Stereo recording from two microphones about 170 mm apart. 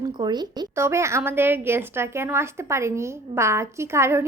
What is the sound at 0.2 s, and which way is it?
A woman's voice, 25° right (ahead or behind).